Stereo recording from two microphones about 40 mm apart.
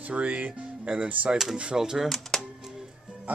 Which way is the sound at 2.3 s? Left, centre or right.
Centre.